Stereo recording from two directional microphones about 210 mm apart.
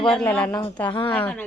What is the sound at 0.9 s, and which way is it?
Speech, 25° left (ahead or behind).